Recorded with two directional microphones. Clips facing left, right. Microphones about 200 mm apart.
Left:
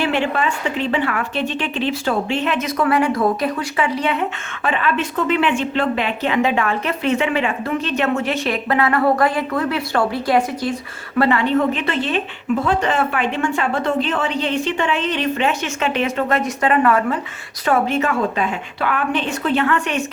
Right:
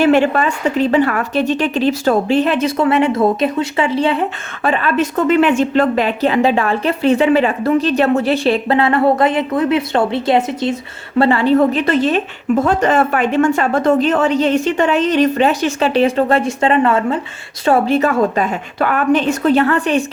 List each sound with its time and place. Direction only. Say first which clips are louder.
0.0 s a woman's voice: right 7 dB; 45° right (ahead or behind)